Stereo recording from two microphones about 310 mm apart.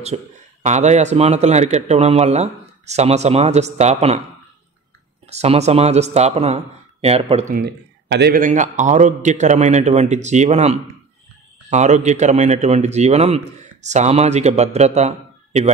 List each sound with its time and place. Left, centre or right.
0.0 s a man's voice: right
5.3 s a man's voice: right
7.5 s a man's voice: right